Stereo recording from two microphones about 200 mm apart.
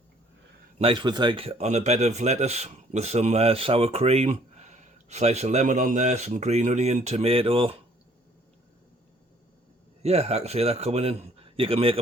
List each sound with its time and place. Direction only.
0.8 s speech: 25° right (ahead or behind)
10.0 s speech: 30° right (ahead or behind)